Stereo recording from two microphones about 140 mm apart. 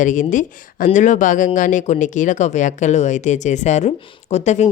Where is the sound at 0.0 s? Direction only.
65° left (ahead or behind).